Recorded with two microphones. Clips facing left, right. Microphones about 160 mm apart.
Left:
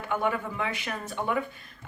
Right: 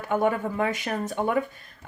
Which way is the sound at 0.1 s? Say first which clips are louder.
Right 5 dB; 45° right (ahead or behind).